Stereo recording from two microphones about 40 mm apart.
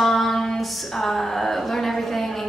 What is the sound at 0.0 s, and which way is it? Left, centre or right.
A woman's voice, centre.